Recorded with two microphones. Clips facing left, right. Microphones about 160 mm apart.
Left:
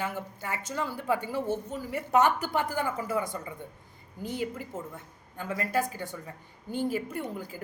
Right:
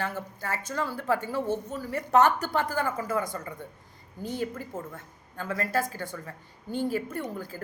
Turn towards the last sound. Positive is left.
turn(degrees=15)  # may be behind; listen again after turning